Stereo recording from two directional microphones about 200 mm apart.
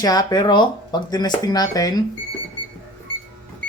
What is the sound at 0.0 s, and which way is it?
Speech, 20° left (ahead or behind).